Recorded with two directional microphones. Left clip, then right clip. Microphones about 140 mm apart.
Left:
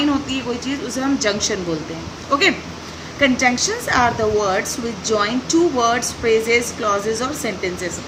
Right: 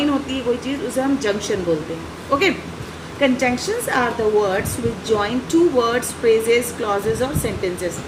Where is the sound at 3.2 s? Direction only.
25° left (ahead or behind).